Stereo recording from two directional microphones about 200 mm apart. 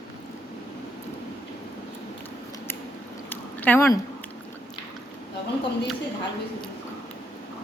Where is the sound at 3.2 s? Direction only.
10° left (ahead or behind).